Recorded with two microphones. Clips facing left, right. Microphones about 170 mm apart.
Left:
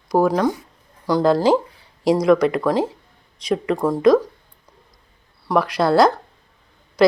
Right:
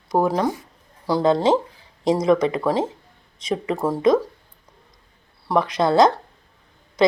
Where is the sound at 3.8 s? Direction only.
5° right (ahead or behind).